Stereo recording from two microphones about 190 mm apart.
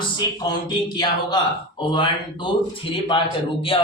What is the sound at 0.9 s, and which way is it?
Speech, 25° left (ahead or behind).